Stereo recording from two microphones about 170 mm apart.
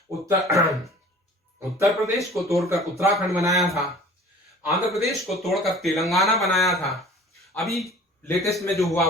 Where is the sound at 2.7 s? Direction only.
15° right (ahead or behind).